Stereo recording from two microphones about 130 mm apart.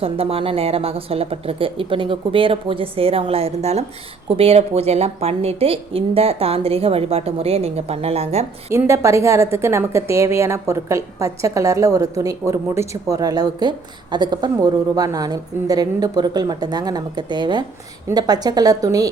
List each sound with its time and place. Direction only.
0.0 s a woman's voice: 45° right (ahead or behind)
8.9 s a woman's voice: 20° right (ahead or behind)